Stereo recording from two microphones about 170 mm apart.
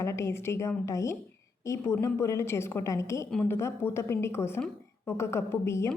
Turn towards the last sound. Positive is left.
turn(degrees=15)  # may be behind; listen again after turning